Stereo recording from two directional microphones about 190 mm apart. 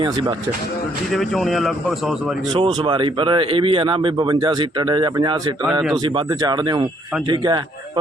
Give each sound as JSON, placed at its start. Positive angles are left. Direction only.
{"t": 1.1, "sound": "speech", "side_deg": 0}
{"t": 2.6, "sound": "speech", "side_deg": -25}